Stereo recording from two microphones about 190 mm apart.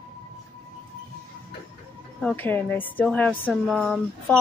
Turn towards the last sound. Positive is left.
turn(degrees=5)  # may be behind; listen again after turning